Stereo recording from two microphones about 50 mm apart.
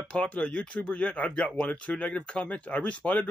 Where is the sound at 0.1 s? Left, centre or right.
Left.